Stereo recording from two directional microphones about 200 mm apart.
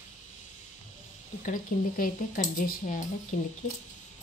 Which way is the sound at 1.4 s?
40° left (ahead or behind).